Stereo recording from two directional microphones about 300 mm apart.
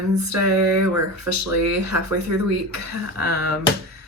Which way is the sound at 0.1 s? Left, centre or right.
Right.